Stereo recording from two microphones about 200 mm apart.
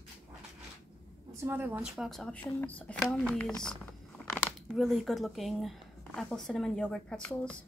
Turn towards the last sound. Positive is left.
turn(degrees=5)  # may be behind; listen again after turning